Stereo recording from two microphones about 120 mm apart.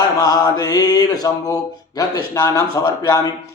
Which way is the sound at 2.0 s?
25° left (ahead or behind).